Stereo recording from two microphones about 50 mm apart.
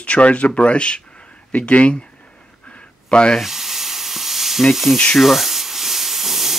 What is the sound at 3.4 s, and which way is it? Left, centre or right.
Sizzle, centre.